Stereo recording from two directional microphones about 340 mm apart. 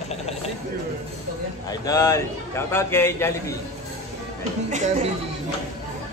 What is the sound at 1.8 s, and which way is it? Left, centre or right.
A man's voice, centre.